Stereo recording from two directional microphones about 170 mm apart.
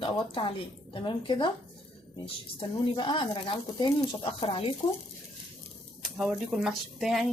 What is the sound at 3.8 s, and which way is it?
Speech, 30° left (ahead or behind).